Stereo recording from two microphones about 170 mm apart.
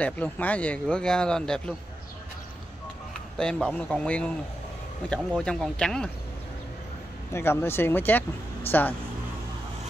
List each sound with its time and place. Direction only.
0.0 s speech: 10° left (ahead or behind)
3.3 s speech: 5° left (ahead or behind)
7.3 s speech: 15° left (ahead or behind)